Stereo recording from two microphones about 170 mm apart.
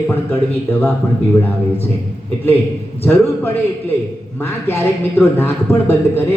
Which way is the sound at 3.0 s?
15° left (ahead or behind).